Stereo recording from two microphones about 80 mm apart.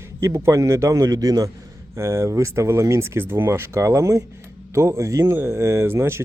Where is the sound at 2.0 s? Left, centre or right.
Right.